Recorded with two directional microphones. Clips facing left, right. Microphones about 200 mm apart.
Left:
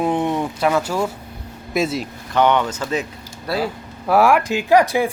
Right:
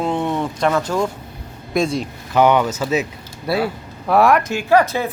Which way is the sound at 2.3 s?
10° right (ahead or behind).